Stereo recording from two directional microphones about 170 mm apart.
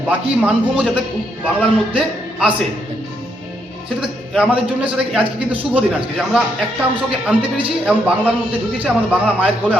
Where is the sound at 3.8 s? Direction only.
5° right (ahead or behind).